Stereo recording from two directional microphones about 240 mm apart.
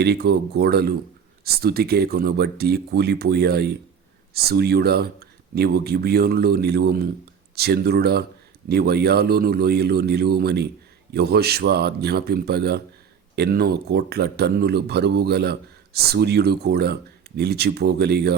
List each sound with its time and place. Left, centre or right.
0.0 s speech: right